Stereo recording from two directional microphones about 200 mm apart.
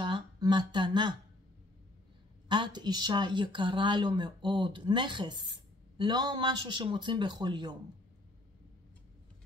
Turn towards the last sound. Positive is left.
turn(degrees=-20)  # may be behind; listen again after turning